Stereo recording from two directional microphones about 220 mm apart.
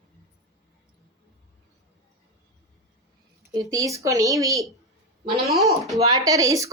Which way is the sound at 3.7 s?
15° right (ahead or behind).